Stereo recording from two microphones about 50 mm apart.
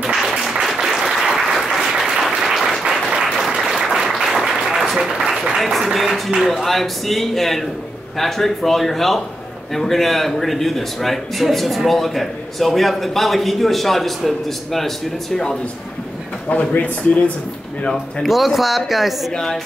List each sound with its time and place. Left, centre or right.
0.1 s applause: centre
2.8 s applause: centre
5.6 s a sound: centre
6.5 s a man's voice: centre
16.4 s speech: left
17.9 s a man's voice: centre
19.3 s a woman's voice: centre